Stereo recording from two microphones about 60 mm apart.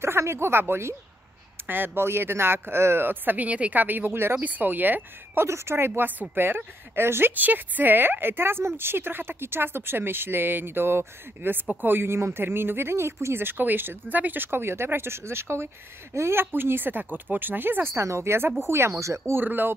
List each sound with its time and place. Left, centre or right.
0.0 s speech: right
4.4 s speech: right
19.3 s speech: right